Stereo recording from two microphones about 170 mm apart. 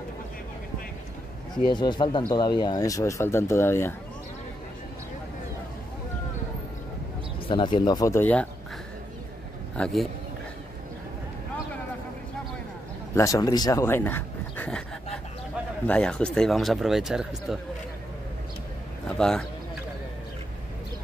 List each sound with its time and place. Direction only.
1.5 s speech: 25° left (ahead or behind)
7.4 s speech: 30° left (ahead or behind); by 8.5 s 10° left (ahead or behind)
9.8 s speech: 5° left (ahead or behind)
13.1 s speech: 20° left (ahead or behind); by 17.6 s centre (ahead or behind)
19.0 s speech: 5° left (ahead or behind)